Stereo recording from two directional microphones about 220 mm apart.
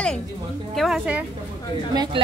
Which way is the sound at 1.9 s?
20° right (ahead or behind).